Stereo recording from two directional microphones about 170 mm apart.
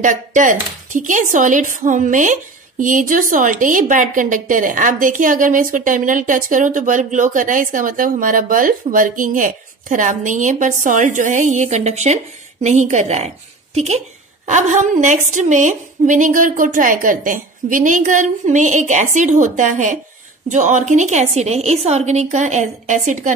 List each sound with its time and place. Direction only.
0.0 s a woman's voice: 50° right (ahead or behind)